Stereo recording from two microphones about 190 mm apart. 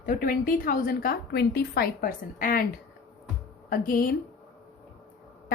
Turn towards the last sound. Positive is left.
turn(degrees=50)  # may be behind; listen again after turning